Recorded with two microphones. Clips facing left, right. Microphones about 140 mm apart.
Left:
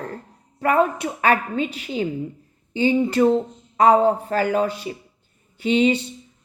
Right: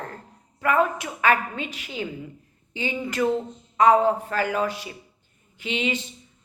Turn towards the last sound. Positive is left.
turn(degrees=35)  # may be behind; listen again after turning